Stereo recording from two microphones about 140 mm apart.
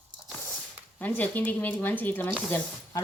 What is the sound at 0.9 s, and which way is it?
Speech, 10° left (ahead or behind).